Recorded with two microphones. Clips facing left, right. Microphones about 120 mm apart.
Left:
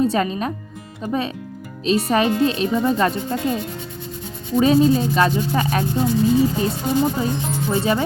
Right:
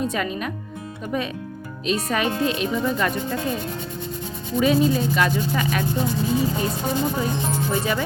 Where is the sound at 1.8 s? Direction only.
30° left (ahead or behind).